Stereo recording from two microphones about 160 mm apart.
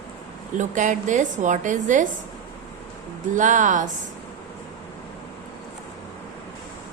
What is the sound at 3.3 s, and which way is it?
Speech, 50° right (ahead or behind).